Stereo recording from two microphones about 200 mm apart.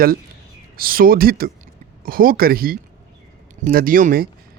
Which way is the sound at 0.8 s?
45° right (ahead or behind).